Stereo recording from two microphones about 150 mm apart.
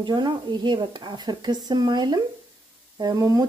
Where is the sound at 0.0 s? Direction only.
30° right (ahead or behind).